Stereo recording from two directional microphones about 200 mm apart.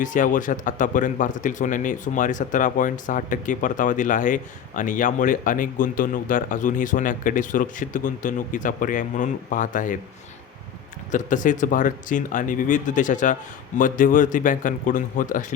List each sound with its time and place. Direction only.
0.0 s a man's voice: 40° left (ahead or behind)
11.1 s a man's voice: 40° left (ahead or behind)